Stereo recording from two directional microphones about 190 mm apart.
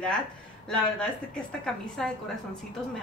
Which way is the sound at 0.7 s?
5° left (ahead or behind).